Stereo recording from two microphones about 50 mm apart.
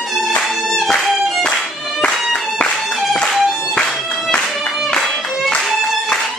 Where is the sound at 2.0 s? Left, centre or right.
Centre.